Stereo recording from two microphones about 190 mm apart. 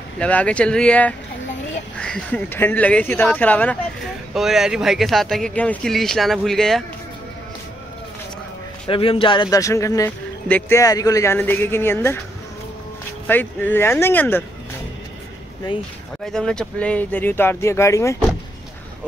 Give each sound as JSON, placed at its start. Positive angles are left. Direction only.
{"t": 0.2, "sound": "speech", "side_deg": 5}
{"t": 8.8, "sound": "speech", "side_deg": 30}
{"t": 13.3, "sound": "speech", "side_deg": 10}
{"t": 16.3, "sound": "speech", "side_deg": 5}